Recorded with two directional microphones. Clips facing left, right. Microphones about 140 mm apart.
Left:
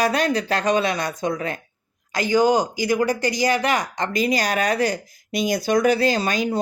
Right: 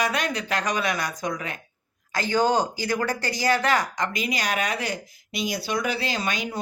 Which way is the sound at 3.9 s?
30° left (ahead or behind).